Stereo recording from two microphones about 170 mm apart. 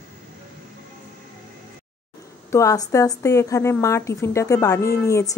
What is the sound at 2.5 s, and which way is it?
A woman's voice, 20° left (ahead or behind).